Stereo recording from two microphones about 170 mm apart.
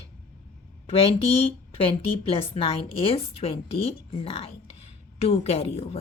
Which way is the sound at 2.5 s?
35° left (ahead or behind).